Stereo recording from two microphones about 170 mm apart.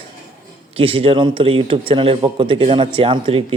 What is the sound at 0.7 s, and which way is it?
A man's voice, 35° right (ahead or behind).